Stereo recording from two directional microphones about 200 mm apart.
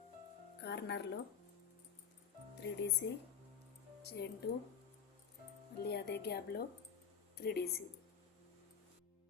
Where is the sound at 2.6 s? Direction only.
55° left (ahead or behind).